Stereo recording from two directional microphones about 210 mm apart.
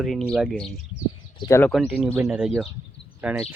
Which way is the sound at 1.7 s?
Centre (ahead or behind).